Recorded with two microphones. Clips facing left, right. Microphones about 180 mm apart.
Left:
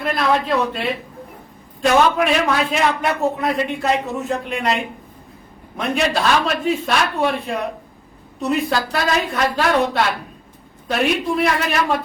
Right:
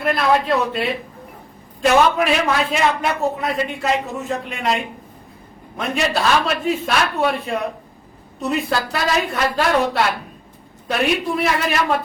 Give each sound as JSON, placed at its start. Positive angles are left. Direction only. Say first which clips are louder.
{"t": 0.0, "sound": "a man's voice", "louder": "right 1 dB", "side_deg": 0}